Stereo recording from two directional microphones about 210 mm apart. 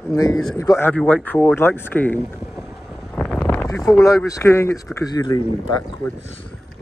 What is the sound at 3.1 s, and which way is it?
Wind noise, 5° left (ahead or behind).